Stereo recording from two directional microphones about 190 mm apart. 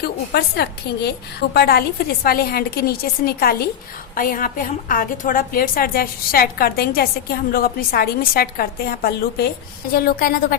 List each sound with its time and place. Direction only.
0.0 s a woman's voice: 60° left (ahead or behind)